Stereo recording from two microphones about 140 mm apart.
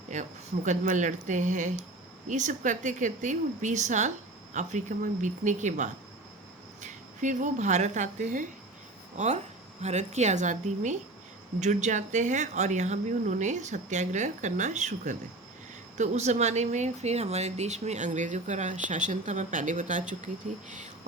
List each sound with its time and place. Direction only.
0.1 s speech: 60° right (ahead or behind)